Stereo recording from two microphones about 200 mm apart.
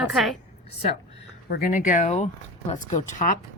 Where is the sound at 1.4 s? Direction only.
50° left (ahead or behind).